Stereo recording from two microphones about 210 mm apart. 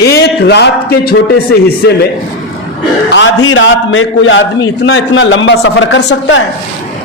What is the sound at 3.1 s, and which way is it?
Speech, 60° left (ahead or behind).